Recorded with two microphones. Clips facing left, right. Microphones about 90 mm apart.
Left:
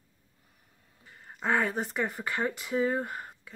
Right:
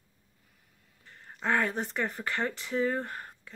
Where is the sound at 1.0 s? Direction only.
5° left (ahead or behind).